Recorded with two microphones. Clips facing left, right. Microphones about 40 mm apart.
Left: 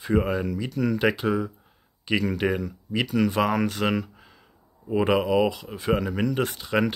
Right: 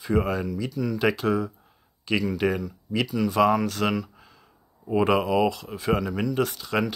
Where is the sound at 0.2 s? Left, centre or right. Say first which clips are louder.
Left 1 dB; centre.